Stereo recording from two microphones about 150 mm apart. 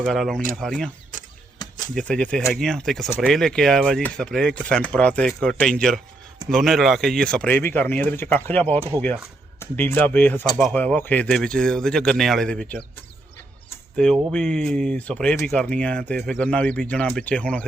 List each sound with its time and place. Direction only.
0.0 s speech: centre (ahead or behind)
1.6 s a sound: 30° left (ahead or behind)
2.0 s speech: 5° left (ahead or behind)
13.9 s speech: 5° left (ahead or behind)